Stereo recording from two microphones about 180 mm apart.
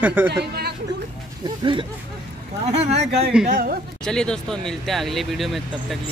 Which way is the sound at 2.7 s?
35° right (ahead or behind).